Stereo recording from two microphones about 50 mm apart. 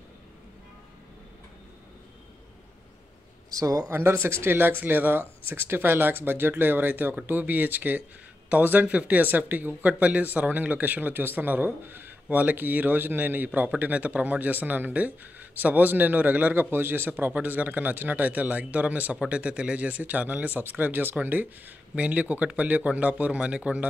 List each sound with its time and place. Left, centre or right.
3.4 s speech: right
3.9 s speech: right
16.7 s speech: right
17.1 s speech: right